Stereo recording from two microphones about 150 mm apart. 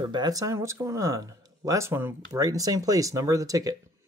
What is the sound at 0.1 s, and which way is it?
Speech, 25° right (ahead or behind).